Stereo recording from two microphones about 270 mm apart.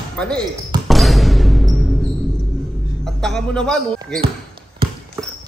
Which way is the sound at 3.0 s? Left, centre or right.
Centre.